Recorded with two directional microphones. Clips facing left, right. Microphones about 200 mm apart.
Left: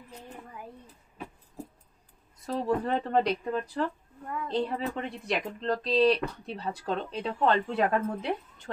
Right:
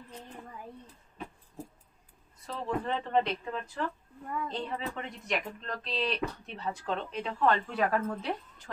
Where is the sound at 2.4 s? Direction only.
40° left (ahead or behind).